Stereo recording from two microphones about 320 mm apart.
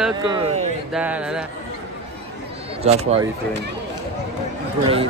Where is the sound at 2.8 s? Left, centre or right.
Centre.